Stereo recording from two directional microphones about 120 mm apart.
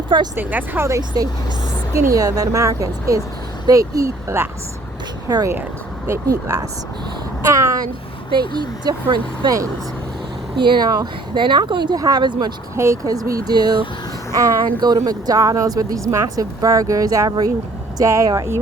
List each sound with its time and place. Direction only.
0.3 s speech: 15° right (ahead or behind)
7.5 s a sound: 25° right (ahead or behind)
8.8 s speech: 40° right (ahead or behind)
10.6 s speech: 40° right (ahead or behind)